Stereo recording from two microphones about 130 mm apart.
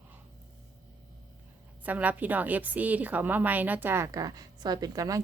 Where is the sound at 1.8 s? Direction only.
10° right (ahead or behind).